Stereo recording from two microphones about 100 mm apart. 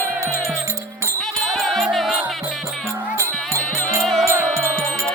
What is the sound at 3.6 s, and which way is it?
Music, 5° left (ahead or behind).